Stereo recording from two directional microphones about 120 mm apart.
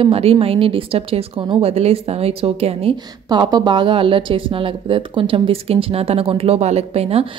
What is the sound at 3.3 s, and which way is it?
A woman's voice, 35° right (ahead or behind).